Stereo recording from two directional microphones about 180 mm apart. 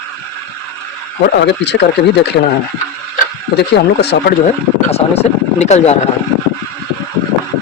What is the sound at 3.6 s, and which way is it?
Speech, 65° left (ahead or behind).